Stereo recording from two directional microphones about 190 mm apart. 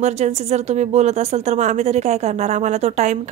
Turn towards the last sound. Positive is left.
turn(degrees=-40)  # may be behind; listen again after turning